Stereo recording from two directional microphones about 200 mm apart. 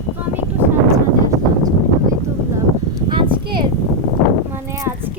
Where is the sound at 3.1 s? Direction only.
25° right (ahead or behind).